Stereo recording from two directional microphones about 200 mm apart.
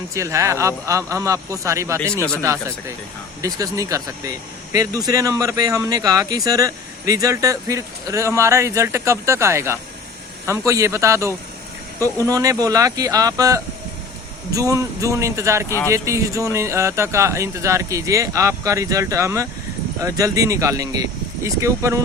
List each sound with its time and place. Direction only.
0.1 s speech: 15° right (ahead or behind)
2.1 s speech: 5° left (ahead or behind)
2.4 s speech: 15° right (ahead or behind)